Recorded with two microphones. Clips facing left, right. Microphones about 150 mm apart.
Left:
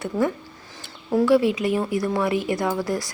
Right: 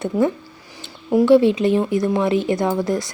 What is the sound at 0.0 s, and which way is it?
Speech, 20° right (ahead or behind).